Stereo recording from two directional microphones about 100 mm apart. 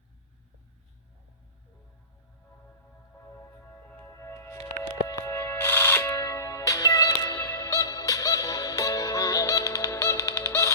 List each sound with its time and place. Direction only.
3.4 s music: 15° left (ahead or behind); by 7.3 s 35° left (ahead or behind)
7.3 s music: 25° left (ahead or behind)